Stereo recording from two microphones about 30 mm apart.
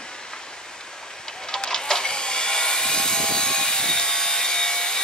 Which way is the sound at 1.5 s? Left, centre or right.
Left.